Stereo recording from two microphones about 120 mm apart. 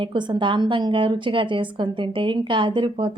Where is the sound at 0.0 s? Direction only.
40° right (ahead or behind).